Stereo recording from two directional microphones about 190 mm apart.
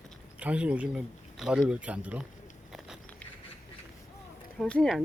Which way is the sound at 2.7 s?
Centre (ahead or behind).